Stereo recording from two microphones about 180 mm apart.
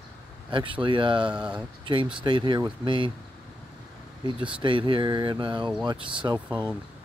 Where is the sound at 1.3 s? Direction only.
5° right (ahead or behind).